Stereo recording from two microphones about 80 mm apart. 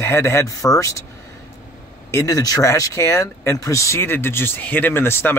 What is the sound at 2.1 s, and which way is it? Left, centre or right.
Speech, left.